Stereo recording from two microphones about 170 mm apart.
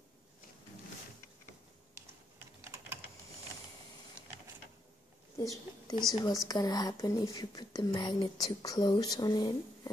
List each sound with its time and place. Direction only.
5.4 s speech: 20° left (ahead or behind)